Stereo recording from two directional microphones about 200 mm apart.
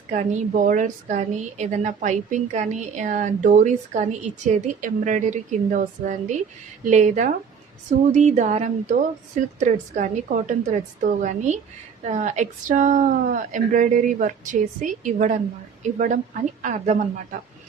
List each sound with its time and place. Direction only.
0.1 s a woman's voice: 35° right (ahead or behind)